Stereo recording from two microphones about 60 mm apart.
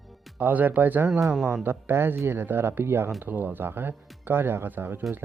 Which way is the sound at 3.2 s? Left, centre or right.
Right.